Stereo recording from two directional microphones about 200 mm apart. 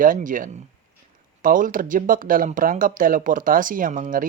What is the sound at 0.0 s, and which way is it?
Speech, 40° right (ahead or behind).